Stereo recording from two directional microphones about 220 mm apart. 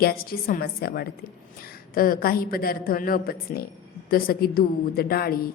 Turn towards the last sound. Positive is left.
turn(degrees=45)  # may be behind; listen again after turning